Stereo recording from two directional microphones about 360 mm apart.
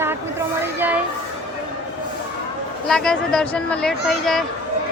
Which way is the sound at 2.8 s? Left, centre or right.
Centre.